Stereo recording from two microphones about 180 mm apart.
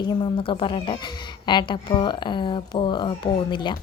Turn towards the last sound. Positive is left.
turn(degrees=25)  # may be behind; listen again after turning